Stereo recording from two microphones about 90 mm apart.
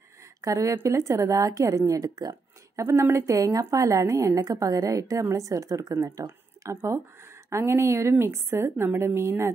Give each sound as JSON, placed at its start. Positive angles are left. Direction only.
{"t": 0.4, "sound": "a woman's voice", "side_deg": -35}
{"t": 2.7, "sound": "a woman's voice", "side_deg": -35}